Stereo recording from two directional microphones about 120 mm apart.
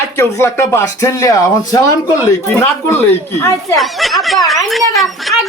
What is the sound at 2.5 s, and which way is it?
Speech, 20° left (ahead or behind).